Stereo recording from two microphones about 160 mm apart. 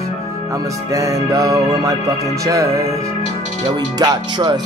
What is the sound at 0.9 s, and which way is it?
Music, 20° right (ahead or behind).